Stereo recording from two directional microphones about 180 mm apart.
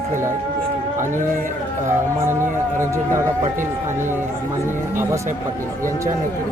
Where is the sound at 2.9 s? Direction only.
15° right (ahead or behind).